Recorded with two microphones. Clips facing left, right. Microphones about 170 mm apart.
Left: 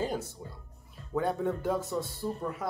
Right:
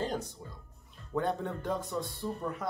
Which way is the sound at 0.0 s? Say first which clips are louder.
Left 2 dB; 5° left (ahead or behind).